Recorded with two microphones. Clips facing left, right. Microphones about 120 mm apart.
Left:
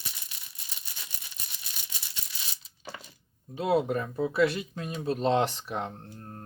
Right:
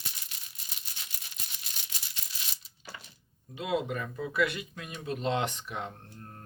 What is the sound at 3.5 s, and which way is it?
Speech, 35° left (ahead or behind).